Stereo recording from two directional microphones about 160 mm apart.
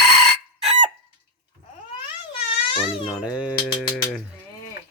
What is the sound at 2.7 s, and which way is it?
Crying, 35° left (ahead or behind).